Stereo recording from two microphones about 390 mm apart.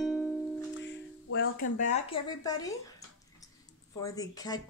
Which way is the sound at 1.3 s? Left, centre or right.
Left.